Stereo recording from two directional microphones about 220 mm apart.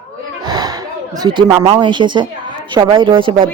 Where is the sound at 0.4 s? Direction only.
20° right (ahead or behind).